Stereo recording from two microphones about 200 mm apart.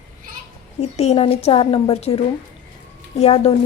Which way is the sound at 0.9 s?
30° left (ahead or behind).